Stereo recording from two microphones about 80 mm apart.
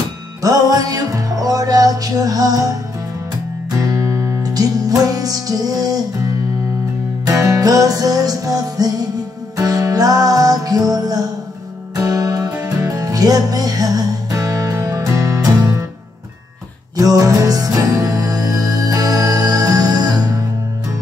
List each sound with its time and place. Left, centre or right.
0.4 s music: right
3.8 s music: right
16.9 s music: right